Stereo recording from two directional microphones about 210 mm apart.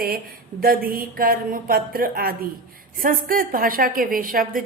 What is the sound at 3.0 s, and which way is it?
A woman's voice, 40° right (ahead or behind).